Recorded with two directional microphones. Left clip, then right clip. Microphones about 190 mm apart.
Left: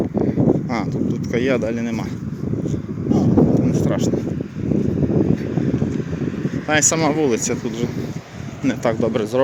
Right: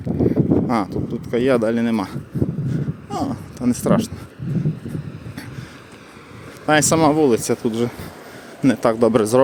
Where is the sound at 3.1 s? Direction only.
30° right (ahead or behind).